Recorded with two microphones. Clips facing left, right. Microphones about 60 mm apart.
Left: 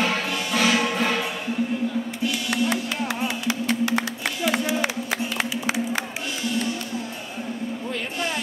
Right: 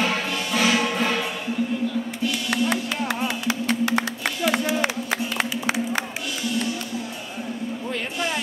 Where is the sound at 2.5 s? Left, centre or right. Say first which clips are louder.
Right 1 dB; right.